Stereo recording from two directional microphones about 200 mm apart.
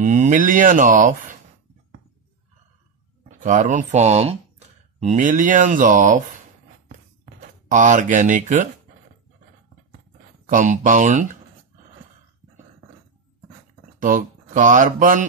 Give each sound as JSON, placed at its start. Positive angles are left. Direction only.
{"t": 0.0, "sound": "speech", "side_deg": -40}
{"t": 3.3, "sound": "speech", "side_deg": -40}
{"t": 7.6, "sound": "speech", "side_deg": -40}
{"t": 10.5, "sound": "speech", "side_deg": -40}
{"t": 13.9, "sound": "speech", "side_deg": -40}